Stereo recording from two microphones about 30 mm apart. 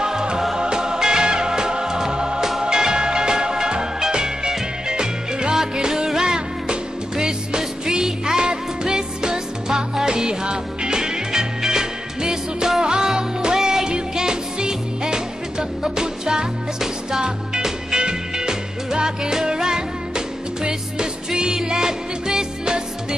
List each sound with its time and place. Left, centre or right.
0.0 s music: right
17.9 s music: right